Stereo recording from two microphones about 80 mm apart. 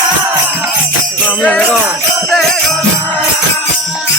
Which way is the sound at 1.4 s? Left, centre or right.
Centre.